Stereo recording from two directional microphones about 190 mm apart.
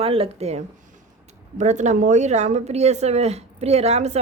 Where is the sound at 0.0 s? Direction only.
30° right (ahead or behind).